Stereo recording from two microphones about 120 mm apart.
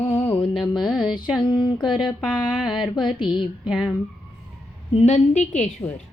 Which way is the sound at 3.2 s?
40° left (ahead or behind).